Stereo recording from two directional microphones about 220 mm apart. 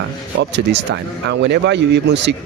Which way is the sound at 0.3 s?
50° right (ahead or behind).